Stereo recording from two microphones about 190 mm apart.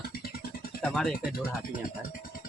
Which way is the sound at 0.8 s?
5° left (ahead or behind).